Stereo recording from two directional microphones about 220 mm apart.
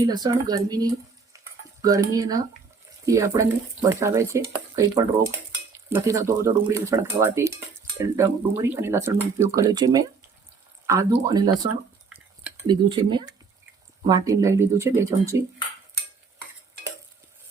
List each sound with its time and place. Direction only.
0.0 s speech: 20° right (ahead or behind)
12.0 s a sound: 5° right (ahead or behind)
12.6 s speech: 20° right (ahead or behind)